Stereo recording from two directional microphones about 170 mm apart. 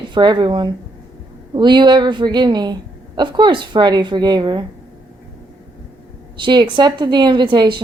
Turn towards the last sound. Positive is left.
turn(degrees=-25)  # may be behind; listen again after turning